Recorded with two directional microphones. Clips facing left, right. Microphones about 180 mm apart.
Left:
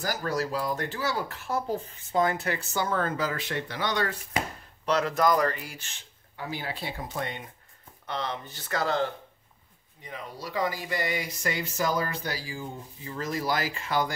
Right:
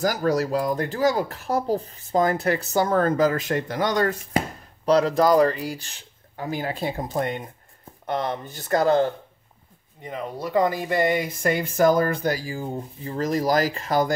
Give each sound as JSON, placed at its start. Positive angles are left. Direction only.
{"t": 0.2, "sound": "speech", "side_deg": -45}
{"t": 4.8, "sound": "speech", "side_deg": -35}
{"t": 10.0, "sound": "speech", "side_deg": -55}